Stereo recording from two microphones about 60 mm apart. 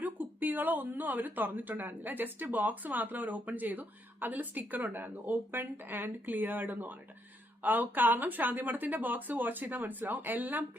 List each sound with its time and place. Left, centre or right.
0.0 s speech: right